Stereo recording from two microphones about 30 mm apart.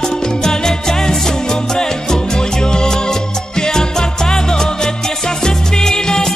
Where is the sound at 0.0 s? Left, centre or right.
Left.